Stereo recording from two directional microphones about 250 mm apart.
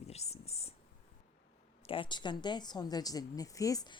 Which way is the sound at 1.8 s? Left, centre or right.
Left.